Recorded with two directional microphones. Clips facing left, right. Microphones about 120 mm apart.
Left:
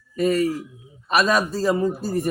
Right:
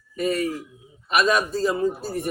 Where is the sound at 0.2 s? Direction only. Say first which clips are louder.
Left 4 dB; 40° left (ahead or behind).